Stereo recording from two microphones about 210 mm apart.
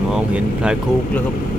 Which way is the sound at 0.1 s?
5° right (ahead or behind).